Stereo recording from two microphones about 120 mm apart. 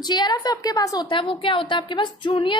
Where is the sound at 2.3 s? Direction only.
45° left (ahead or behind).